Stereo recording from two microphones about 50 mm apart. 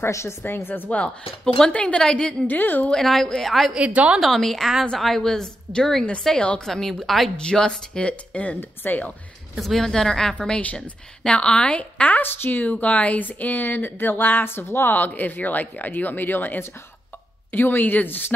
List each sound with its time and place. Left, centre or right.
0.1 s a woman's voice: left
0.8 s a woman's voice: left
2.4 s speech: left
2.9 s a woman's voice: centre
3.7 s a woman's voice: right
4.2 s a woman's voice: centre
7.3 s a woman's voice: centre
8.1 s a woman's voice: left
8.5 s speech: left
9.6 s a woman's voice: centre; by 12.2 s left
12.2 s speech: left
14.4 s speech: left